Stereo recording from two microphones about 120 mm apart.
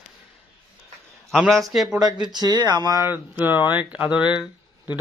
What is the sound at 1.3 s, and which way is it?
Speech, centre (ahead or behind).